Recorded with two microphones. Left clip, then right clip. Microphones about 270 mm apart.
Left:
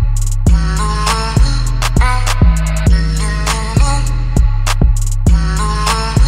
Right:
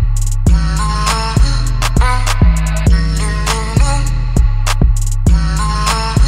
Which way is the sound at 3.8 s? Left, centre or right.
Centre.